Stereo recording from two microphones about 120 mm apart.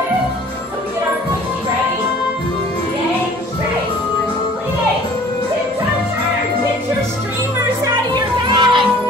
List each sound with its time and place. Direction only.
7.8 s music: 40° right (ahead or behind)